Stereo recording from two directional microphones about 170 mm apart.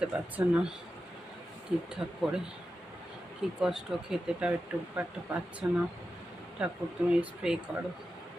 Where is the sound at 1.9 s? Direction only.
5° right (ahead or behind).